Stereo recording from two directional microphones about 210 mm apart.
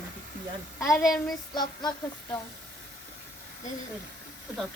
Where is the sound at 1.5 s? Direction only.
20° left (ahead or behind).